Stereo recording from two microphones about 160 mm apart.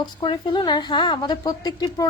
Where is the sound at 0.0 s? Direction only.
30° left (ahead or behind).